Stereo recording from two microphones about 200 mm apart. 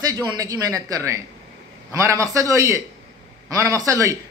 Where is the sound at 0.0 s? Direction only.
20° right (ahead or behind).